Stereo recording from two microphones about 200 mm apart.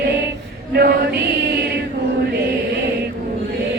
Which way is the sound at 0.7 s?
50° right (ahead or behind).